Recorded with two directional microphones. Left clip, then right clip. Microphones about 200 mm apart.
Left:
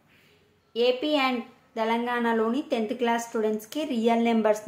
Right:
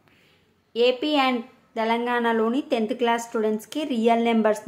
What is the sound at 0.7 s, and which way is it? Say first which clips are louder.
A woman's voice: right 3 dB; 20° right (ahead or behind).